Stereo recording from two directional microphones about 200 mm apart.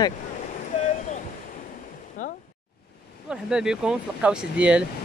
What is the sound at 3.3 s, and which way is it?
Speech, 5° right (ahead or behind).